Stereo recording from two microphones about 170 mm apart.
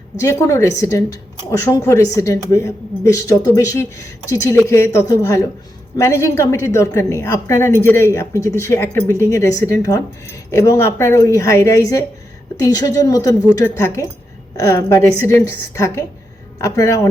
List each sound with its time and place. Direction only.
0.2 s a woman's voice: 15° left (ahead or behind)